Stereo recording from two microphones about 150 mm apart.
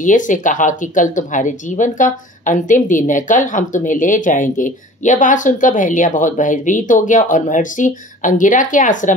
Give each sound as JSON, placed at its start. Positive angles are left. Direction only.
{"t": 0.0, "sound": "a woman's voice", "side_deg": 60}